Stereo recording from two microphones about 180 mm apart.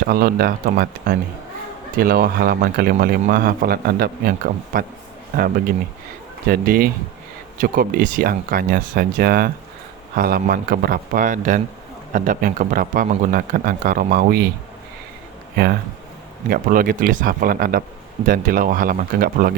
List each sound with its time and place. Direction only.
0.1 s speech: 55° right (ahead or behind)
6.5 s a man's voice: 55° right (ahead or behind)
16.5 s a man's voice: 50° right (ahead or behind)